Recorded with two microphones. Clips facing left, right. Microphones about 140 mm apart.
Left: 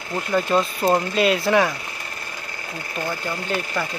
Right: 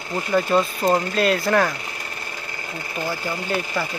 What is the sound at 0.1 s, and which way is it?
Speech, centre (ahead or behind).